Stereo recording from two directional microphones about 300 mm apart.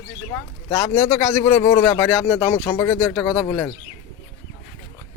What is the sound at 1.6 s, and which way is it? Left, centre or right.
Speech, centre.